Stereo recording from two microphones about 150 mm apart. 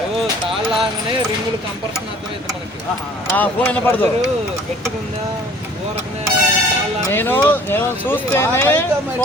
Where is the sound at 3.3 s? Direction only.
15° left (ahead or behind).